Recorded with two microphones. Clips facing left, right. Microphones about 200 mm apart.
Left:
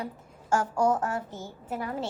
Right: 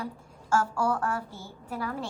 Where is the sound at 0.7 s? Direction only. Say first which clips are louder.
Left 3 dB; 20° left (ahead or behind).